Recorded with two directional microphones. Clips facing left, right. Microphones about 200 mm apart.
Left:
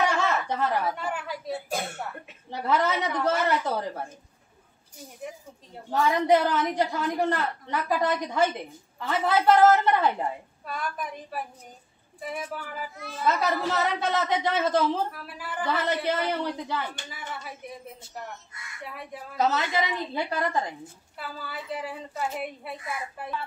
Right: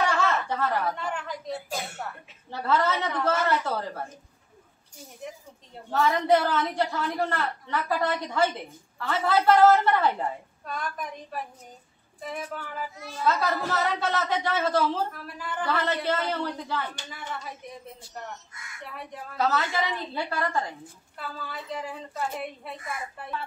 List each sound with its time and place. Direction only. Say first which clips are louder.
0.0 s chuckle: even; 15° left (ahead or behind)
0.9 s a woman's voice: left 1 dB; 5° left (ahead or behind)
2.5 s a woman's voice: even; 15° left (ahead or behind)
5.9 s a woman's voice: left 1 dB; 15° left (ahead or behind)
10.6 s a woman's voice: left 1 dB; 5° left (ahead or behind)
13.2 s a woman's voice: even; 20° left (ahead or behind)
15.0 s a woman's voice: right 1 dB; 5° left (ahead or behind)
19.3 s a woman's voice: left 1 dB; 20° left (ahead or behind)
21.2 s a woman's voice: even; 5° left (ahead or behind)